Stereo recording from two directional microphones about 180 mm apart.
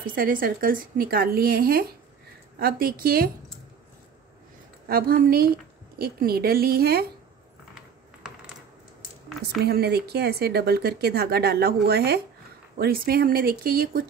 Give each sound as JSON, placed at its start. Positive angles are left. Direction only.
{"t": 0.0, "sound": "speech", "side_deg": -50}
{"t": 4.8, "sound": "speech", "side_deg": -55}
{"t": 9.7, "sound": "speech", "side_deg": -65}